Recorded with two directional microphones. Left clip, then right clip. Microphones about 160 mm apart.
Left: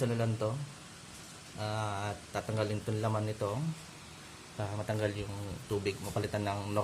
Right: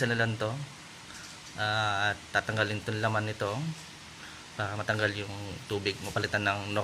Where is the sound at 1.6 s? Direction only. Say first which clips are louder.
Right 8 dB; 20° right (ahead or behind).